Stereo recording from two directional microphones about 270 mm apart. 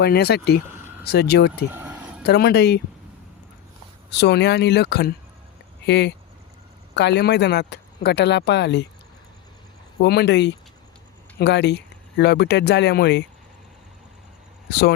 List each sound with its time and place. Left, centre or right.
0.0 s speech: left
1.7 s a sound: centre
2.2 s speech: left
4.2 s speech: left
10.0 s speech: left
14.7 s speech: left